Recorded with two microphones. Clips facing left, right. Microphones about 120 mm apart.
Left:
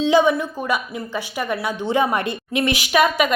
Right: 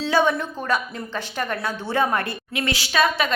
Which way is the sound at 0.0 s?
15° left (ahead or behind).